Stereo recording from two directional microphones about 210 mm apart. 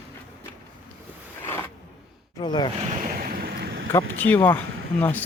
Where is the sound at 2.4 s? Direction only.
20° left (ahead or behind).